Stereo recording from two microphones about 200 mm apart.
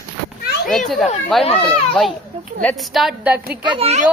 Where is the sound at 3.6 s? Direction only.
30° right (ahead or behind).